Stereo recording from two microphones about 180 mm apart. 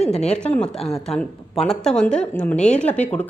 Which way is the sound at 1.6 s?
5° left (ahead or behind).